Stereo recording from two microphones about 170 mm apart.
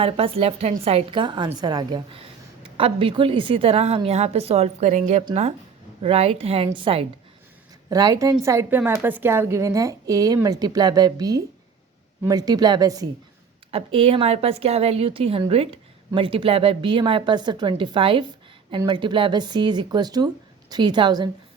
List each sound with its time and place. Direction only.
0.0 s a woman's voice: 35° right (ahead or behind)
13.7 s a woman's voice: 35° right (ahead or behind)